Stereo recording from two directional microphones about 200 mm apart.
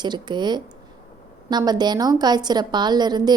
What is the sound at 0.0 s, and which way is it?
A woman's voice, 20° right (ahead or behind).